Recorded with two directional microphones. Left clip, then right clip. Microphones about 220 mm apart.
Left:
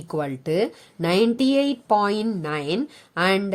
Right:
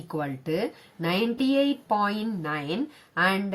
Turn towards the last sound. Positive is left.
turn(degrees=50)  # may be behind; listen again after turning